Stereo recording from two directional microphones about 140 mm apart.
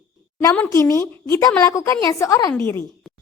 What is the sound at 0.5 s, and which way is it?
A woman's voice, 15° left (ahead or behind).